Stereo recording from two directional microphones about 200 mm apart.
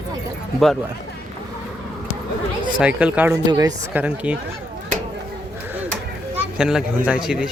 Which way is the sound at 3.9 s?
10° right (ahead or behind).